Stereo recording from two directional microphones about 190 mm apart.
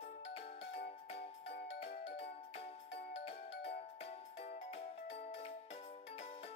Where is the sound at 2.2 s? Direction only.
30° left (ahead or behind).